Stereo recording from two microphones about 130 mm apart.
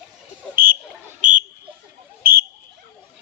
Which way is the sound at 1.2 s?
90° right.